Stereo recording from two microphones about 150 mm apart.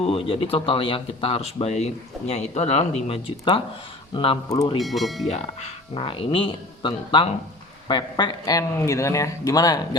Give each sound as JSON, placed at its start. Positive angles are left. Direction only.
{"t": 0.0, "sound": "speech", "side_deg": 35}
{"t": 4.4, "sound": "speech", "side_deg": 20}
{"t": 4.8, "sound": "speech", "side_deg": 0}
{"t": 5.3, "sound": "speech", "side_deg": 40}